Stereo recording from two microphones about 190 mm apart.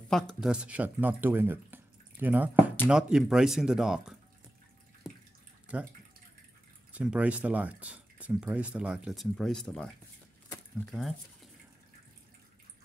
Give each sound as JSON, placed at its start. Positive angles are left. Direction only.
{"t": 0.1, "sound": "speech", "side_deg": 0}
{"t": 6.9, "sound": "speech", "side_deg": -5}
{"t": 10.9, "sound": "speech", "side_deg": 0}